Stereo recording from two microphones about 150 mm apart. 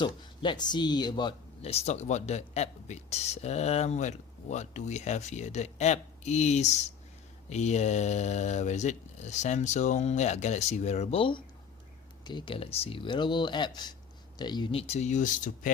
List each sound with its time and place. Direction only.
0.0 s speech: 30° left (ahead or behind)
1.6 s speech: 45° left (ahead or behind)